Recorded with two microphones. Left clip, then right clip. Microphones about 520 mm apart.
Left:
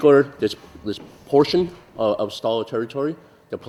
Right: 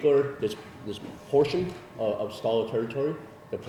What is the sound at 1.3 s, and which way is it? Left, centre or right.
A man's voice, left.